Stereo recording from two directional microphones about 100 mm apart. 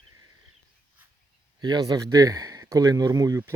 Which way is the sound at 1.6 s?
45° right (ahead or behind).